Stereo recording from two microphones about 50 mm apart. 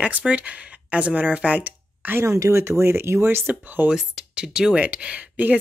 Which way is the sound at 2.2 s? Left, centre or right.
Right.